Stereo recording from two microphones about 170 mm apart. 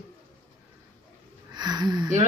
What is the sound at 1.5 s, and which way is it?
Speech, 25° right (ahead or behind).